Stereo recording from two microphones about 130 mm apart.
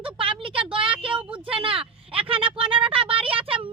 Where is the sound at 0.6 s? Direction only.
10° right (ahead or behind).